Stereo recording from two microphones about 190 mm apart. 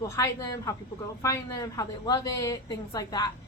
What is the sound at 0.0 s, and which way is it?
A woman's voice, 15° left (ahead or behind).